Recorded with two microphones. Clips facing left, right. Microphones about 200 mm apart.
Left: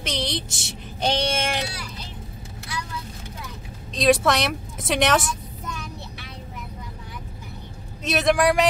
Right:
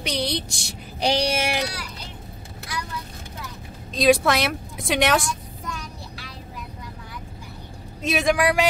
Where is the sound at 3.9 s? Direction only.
Centre (ahead or behind).